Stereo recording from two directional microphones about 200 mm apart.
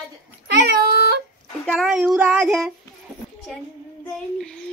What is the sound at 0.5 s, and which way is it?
Cat, 55° right (ahead or behind).